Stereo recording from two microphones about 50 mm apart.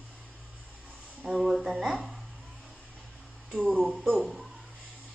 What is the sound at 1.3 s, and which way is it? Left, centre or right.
Speech, centre.